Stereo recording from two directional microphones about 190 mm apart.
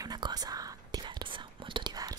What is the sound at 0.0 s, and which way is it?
Whispering, 20° right (ahead or behind).